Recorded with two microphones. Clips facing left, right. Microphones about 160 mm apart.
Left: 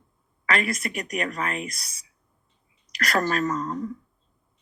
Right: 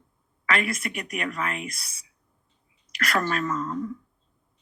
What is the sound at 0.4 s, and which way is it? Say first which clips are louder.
Speech: left 1 dB; 40° left (ahead or behind).